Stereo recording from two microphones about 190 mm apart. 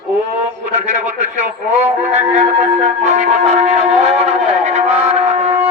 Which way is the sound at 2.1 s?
35° right (ahead or behind).